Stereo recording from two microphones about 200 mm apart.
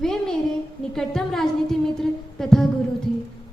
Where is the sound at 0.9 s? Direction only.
Centre (ahead or behind).